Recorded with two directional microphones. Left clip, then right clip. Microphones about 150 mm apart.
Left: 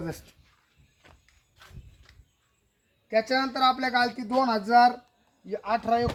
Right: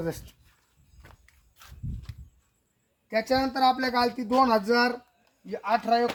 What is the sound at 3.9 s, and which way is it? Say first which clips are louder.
A woman's voice: right 1 dB; 15° left (ahead or behind).